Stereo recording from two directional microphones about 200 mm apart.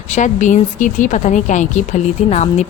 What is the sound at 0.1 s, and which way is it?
A woman's voice, 35° left (ahead or behind).